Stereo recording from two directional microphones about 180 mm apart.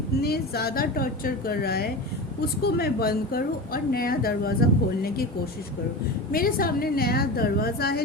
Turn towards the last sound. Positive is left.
turn(degrees=60)  # may be behind; listen again after turning